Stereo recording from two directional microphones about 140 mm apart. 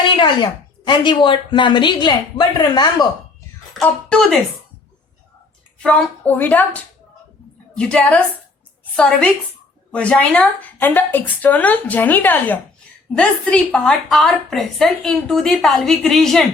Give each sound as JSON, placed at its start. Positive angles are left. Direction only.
{"t": 0.9, "sound": "a woman's voice", "side_deg": 35}
{"t": 3.8, "sound": "a woman's voice", "side_deg": 5}
{"t": 5.8, "sound": "a woman's voice", "side_deg": 10}